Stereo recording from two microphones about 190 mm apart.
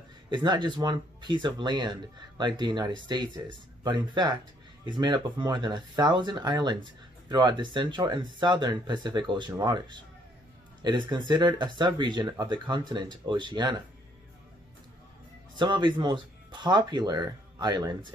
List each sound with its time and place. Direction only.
0.3 s speech: 25° right (ahead or behind)
15.5 s speech: 25° right (ahead or behind)